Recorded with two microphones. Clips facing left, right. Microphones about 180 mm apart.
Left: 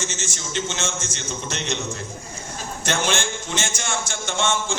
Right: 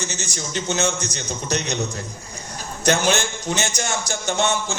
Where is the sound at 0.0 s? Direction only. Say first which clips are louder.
Right 1 dB; 40° right (ahead or behind).